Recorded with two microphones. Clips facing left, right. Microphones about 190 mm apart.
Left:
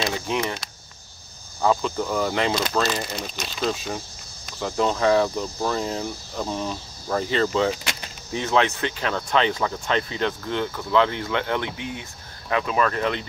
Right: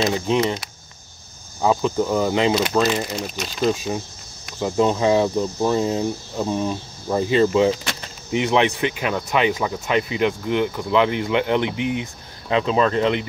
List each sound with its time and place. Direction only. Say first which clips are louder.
0.0 s speech: right 6 dB; 20° right (ahead or behind)
1.6 s speech: right 3 dB; 20° right (ahead or behind)